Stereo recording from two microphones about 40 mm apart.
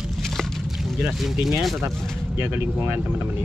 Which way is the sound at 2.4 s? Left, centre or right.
Right.